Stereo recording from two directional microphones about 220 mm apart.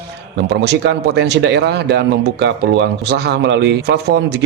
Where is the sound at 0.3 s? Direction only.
50° right (ahead or behind).